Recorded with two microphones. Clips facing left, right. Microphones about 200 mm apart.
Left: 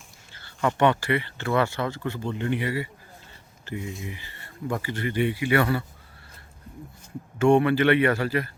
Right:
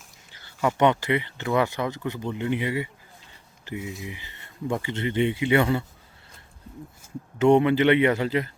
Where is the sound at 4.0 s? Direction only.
15° right (ahead or behind).